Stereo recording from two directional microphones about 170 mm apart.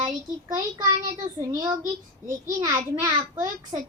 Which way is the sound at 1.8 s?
20° right (ahead or behind).